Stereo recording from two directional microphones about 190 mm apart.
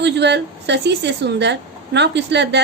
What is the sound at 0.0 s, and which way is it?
A woman's voice, 65° right (ahead or behind).